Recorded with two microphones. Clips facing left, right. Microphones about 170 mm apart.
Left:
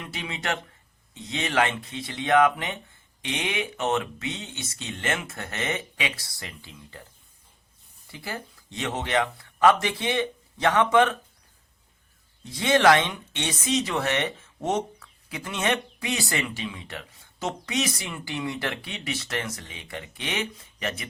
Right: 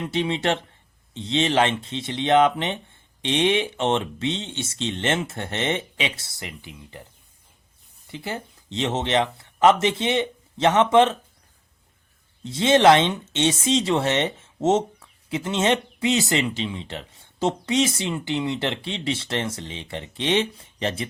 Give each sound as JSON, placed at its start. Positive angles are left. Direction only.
{"t": 0.0, "sound": "speech", "side_deg": -30}
{"t": 8.0, "sound": "speech", "side_deg": -20}
{"t": 12.4, "sound": "speech", "side_deg": -25}